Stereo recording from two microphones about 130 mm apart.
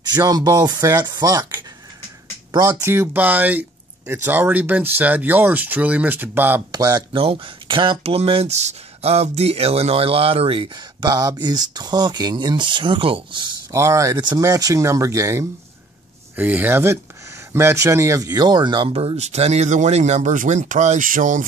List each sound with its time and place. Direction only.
0.1 s speech: 30° right (ahead or behind)
6.7 s speech: 30° right (ahead or behind)
11.1 s speech: 30° right (ahead or behind)
13.7 s speech: 25° right (ahead or behind); by 21.5 s 90° right